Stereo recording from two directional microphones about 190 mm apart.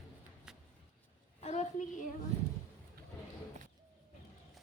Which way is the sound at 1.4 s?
35° left (ahead or behind).